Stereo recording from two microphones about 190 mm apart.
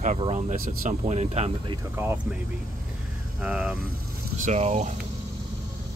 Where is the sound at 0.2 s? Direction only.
40° right (ahead or behind).